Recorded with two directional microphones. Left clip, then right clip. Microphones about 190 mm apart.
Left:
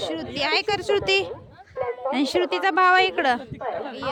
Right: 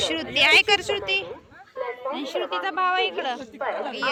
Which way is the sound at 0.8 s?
55° left (ahead or behind).